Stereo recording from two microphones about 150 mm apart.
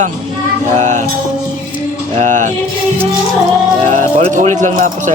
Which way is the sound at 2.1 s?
55° right (ahead or behind).